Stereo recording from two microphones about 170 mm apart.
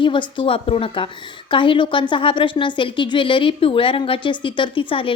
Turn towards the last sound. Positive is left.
turn(degrees=30)  # may be behind; listen again after turning